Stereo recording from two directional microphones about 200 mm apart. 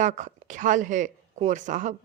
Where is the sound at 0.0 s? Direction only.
40° right (ahead or behind).